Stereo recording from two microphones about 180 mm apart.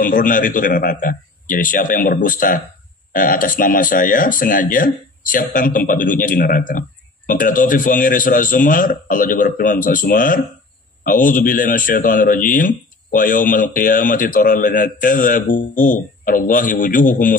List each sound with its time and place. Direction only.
0.0 s a man's voice: 50° left (ahead or behind)